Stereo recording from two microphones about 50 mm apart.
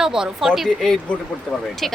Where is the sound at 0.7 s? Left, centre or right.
Centre.